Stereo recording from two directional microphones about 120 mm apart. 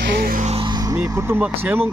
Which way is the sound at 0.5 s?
40° right (ahead or behind).